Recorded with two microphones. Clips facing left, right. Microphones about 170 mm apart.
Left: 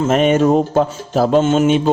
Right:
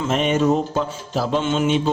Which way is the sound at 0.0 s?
50° left (ahead or behind).